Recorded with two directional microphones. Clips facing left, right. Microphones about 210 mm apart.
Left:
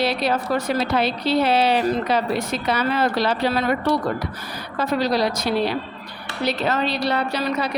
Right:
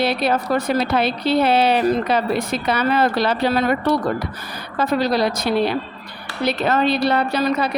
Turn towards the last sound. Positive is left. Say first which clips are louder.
# right 4 dB
turn(degrees=-50)  # may be behind; listen again after turning